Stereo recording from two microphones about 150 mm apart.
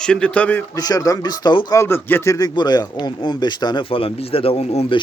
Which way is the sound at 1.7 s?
15° left (ahead or behind).